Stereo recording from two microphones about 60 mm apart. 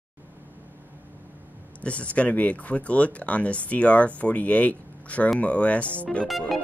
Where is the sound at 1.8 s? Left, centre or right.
Left.